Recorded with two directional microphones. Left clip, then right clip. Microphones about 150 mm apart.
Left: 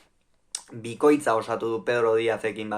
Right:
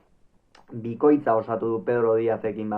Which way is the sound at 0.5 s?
15° left (ahead or behind).